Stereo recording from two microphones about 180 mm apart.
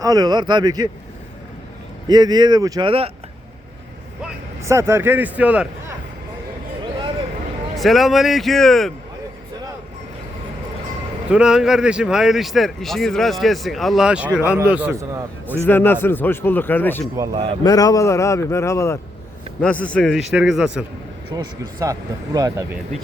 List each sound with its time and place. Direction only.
0.0 s speech: 20° right (ahead or behind)
2.0 s speech: 25° right (ahead or behind)
4.6 s speech: 15° right (ahead or behind)
7.8 s speech: centre (ahead or behind)
11.3 s speech: 5° right (ahead or behind)
15.6 s speech: 10° left (ahead or behind)
17.2 s speech: 25° right (ahead or behind)
17.6 s speech: 20° left (ahead or behind); by 20.8 s 5° right (ahead or behind)
21.3 s speech: 20° right (ahead or behind)